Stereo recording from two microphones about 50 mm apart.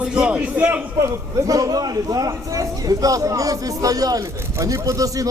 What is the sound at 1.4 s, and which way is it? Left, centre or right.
Speech, right.